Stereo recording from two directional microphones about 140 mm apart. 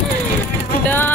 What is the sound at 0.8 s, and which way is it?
Music, 15° left (ahead or behind).